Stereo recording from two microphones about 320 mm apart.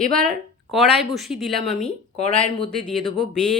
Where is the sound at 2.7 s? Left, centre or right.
Centre.